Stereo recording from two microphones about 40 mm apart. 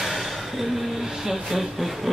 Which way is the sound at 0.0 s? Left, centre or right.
Centre.